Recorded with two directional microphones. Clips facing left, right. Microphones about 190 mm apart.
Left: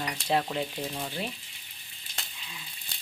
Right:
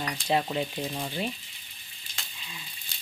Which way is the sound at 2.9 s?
60° left (ahead or behind).